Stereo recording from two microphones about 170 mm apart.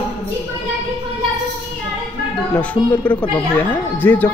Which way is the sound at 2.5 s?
10° left (ahead or behind).